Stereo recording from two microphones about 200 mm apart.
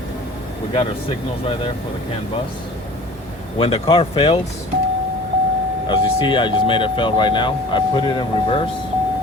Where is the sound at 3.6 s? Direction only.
30° left (ahead or behind).